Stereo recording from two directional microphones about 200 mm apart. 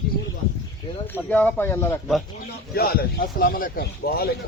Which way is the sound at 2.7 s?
50° left (ahead or behind).